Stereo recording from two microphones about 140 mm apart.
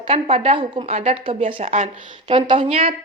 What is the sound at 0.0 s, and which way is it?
Speech, 45° right (ahead or behind).